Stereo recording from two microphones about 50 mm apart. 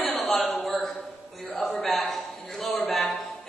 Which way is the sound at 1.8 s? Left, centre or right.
Centre.